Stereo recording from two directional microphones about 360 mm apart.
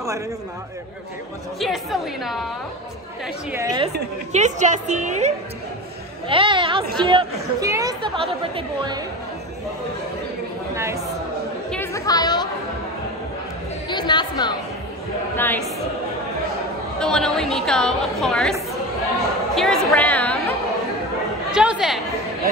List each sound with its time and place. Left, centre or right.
1.6 s a woman's voice: centre
3.5 s a woman's voice: centre
11.7 s chatter: centre
13.8 s a sound: centre
15.3 s speech: centre
17.0 s a woman's voice: centre